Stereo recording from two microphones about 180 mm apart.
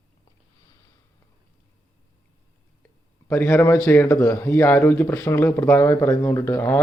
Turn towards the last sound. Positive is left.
turn(degrees=10)  # may be behind; listen again after turning